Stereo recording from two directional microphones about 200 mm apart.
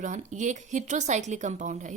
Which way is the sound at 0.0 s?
35° right (ahead or behind).